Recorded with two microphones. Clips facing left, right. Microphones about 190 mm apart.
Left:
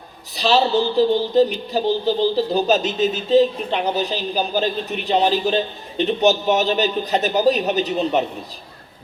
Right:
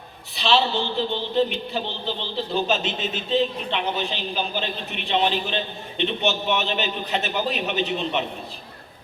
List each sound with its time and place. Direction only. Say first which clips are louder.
0.3 s speech: left 5 dB; 40° left (ahead or behind)